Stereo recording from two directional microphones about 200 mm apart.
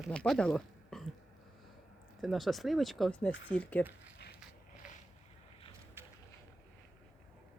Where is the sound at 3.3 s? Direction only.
65° left (ahead or behind).